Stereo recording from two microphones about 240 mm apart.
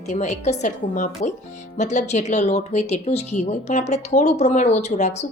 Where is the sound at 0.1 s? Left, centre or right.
Left.